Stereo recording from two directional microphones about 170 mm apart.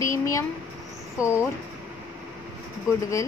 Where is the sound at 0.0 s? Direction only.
20° left (ahead or behind).